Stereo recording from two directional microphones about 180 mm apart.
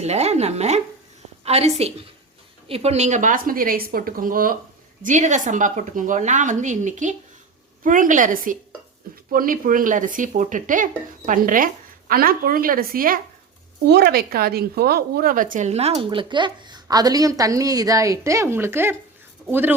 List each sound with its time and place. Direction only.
0.0 s a woman's voice: 35° right (ahead or behind); by 13.1 s 55° right (ahead or behind)
13.8 s a woman's voice: 65° right (ahead or behind); by 19.7 s 10° right (ahead or behind)